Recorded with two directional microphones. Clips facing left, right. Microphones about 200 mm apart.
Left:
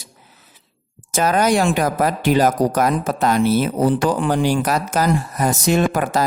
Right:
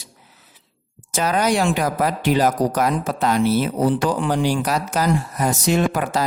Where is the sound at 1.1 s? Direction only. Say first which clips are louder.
Left 3 dB; 50° left (ahead or behind).